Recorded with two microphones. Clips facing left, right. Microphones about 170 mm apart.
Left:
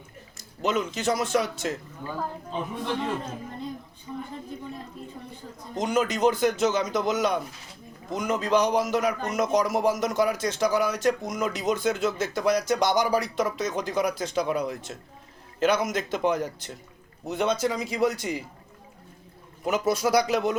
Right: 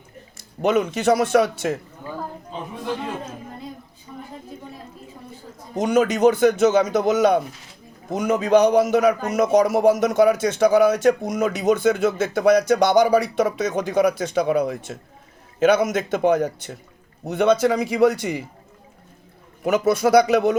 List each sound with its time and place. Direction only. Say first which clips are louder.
0.6 s speech: right 7 dB; 60° right (ahead or behind)
5.7 s speech: right 6 dB; 65° right (ahead or behind)
19.6 s speech: right 6 dB; 60° right (ahead or behind)